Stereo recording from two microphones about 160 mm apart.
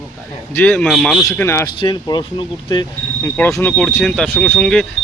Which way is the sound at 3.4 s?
15° left (ahead or behind).